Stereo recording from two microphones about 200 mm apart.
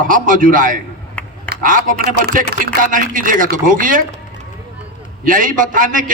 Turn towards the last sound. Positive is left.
turn(degrees=-40)  # may be behind; listen again after turning